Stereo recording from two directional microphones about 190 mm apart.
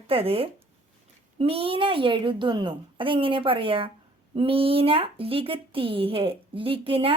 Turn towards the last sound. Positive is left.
turn(degrees=-30)  # may be behind; listen again after turning